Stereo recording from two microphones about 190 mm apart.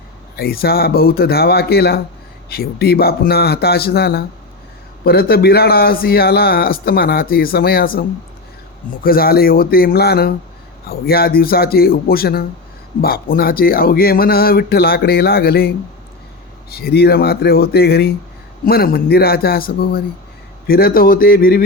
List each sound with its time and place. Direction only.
0.3 s a man's voice: 55° left (ahead or behind)
9.0 s a man's voice: 50° left (ahead or behind)